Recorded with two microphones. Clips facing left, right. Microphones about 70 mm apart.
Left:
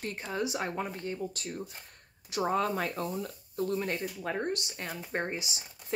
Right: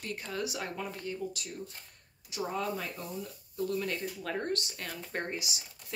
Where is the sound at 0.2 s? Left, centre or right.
Left.